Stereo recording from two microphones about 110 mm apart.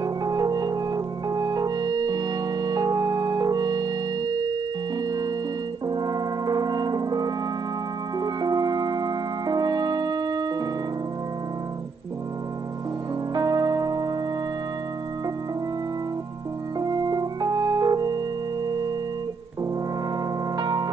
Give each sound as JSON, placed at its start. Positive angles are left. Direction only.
{"t": 0.0, "sound": "music", "side_deg": -35}
{"t": 5.9, "sound": "music", "side_deg": -40}
{"t": 13.3, "sound": "music", "side_deg": -40}
{"t": 16.8, "sound": "music", "side_deg": -40}
{"t": 20.5, "sound": "music", "side_deg": -40}